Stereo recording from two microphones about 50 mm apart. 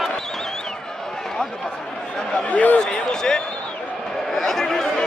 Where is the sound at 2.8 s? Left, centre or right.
Centre.